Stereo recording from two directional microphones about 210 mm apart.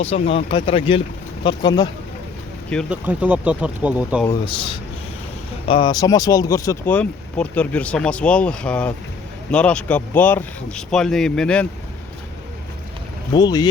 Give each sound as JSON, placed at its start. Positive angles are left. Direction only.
{"t": 0.0, "sound": "speech", "side_deg": 30}
{"t": 2.6, "sound": "speech", "side_deg": 5}
{"t": 3.1, "sound": "speech", "side_deg": -5}
{"t": 4.3, "sound": "speech", "side_deg": 25}
{"t": 13.3, "sound": "speech", "side_deg": 20}